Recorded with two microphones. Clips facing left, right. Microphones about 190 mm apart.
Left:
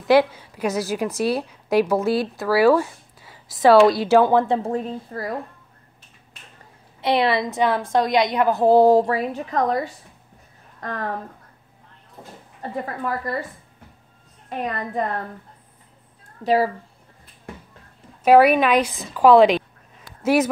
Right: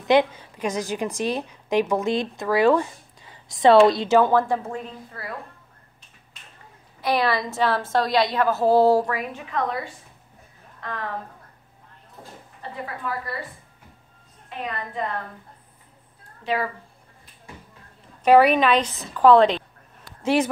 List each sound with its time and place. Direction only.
0.1 s a woman's voice: 5° left (ahead or behind)
4.6 s a woman's voice: 40° left (ahead or behind)
7.0 s a woman's voice: 25° left (ahead or behind)
9.0 s a woman's voice: 35° left (ahead or behind)
12.8 s a woman's voice: 45° left (ahead or behind)
14.5 s a woman's voice: 45° left (ahead or behind)
16.4 s a woman's voice: 35° left (ahead or behind)
18.2 s a woman's voice: 10° left (ahead or behind)